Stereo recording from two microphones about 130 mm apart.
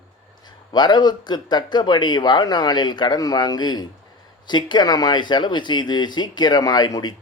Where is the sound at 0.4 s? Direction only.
35° left (ahead or behind).